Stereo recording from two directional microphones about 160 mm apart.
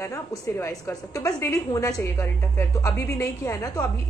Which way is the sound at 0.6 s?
20° left (ahead or behind).